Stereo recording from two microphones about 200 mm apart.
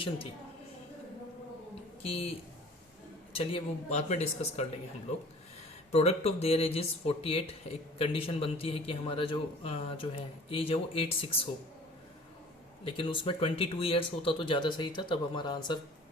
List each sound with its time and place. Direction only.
2.0 s speech: 30° left (ahead or behind)
3.3 s speech: 30° left (ahead or behind)
5.9 s speech: 30° left (ahead or behind)
12.8 s speech: 25° left (ahead or behind)